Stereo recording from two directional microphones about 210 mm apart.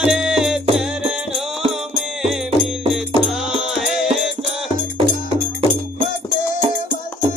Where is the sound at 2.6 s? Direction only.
Centre (ahead or behind).